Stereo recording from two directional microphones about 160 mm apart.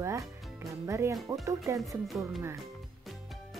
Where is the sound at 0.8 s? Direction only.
20° right (ahead or behind).